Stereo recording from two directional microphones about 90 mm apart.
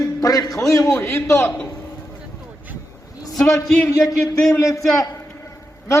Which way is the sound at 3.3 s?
5° left (ahead or behind).